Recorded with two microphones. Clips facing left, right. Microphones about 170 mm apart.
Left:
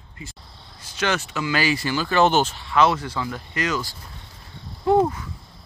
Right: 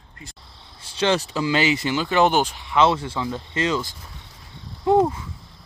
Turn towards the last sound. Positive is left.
turn(degrees=-20)  # may be behind; listen again after turning